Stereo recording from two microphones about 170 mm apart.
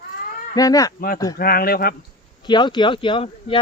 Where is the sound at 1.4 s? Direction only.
60° left (ahead or behind).